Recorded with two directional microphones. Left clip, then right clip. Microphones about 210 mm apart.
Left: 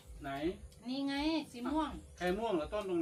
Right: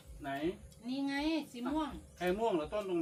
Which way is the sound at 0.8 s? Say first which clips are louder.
Even; 10° right (ahead or behind).